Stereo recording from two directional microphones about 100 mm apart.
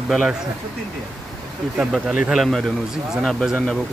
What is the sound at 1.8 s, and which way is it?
Speech, 10° right (ahead or behind).